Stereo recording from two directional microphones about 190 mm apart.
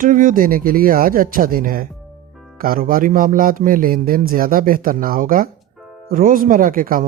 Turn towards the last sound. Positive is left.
turn(degrees=-45)  # may be behind; listen again after turning